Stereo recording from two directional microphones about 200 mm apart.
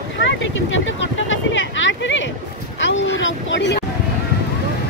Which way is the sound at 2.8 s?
70° left (ahead or behind).